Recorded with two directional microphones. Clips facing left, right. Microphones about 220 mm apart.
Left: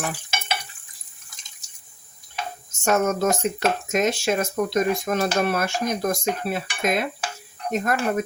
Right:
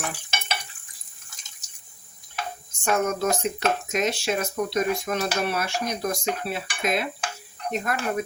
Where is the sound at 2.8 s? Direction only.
45° left (ahead or behind).